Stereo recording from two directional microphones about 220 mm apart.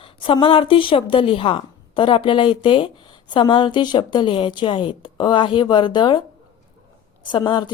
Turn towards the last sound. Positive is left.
turn(degrees=20)  # may be behind; listen again after turning